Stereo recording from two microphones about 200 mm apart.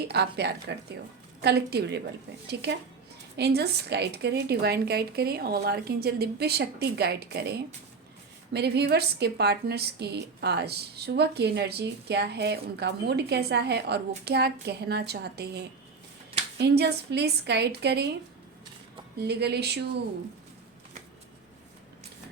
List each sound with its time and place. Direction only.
0.0 s a woman's voice: 55° right (ahead or behind)
8.5 s a woman's voice: 55° right (ahead or behind)
16.6 s a woman's voice: 55° right (ahead or behind)
19.2 s a woman's voice: 55° right (ahead or behind)